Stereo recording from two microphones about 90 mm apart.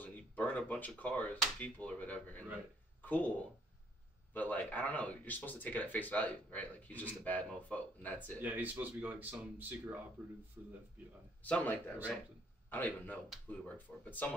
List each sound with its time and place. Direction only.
0.0 s a sound: 15° left (ahead or behind)
1.6 s speech: 15° left (ahead or behind)
8.4 s speech: 20° right (ahead or behind)
10.6 s speech: 25° right (ahead or behind)
11.4 s a man's voice: 15° left (ahead or behind)